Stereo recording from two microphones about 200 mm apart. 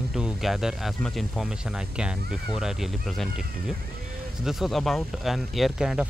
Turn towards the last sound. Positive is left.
turn(degrees=0)  # may be behind; listen again after turning